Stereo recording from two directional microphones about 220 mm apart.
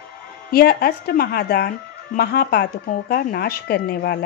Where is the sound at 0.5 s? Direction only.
45° left (ahead or behind).